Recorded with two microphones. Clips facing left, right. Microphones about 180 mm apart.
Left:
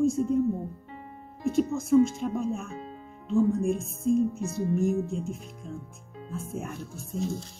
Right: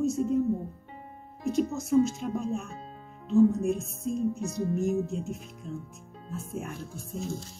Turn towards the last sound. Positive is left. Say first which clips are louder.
# left 3 dB
turn(degrees=0)  # may be behind; listen again after turning